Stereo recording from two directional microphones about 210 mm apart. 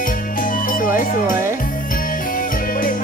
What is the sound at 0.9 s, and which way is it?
Music, 40° left (ahead or behind).